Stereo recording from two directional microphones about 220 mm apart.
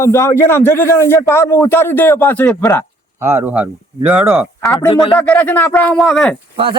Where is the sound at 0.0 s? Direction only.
10° left (ahead or behind).